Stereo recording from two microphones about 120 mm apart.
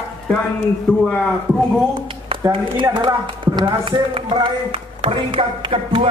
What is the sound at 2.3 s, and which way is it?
A woman's voice, 45° right (ahead or behind).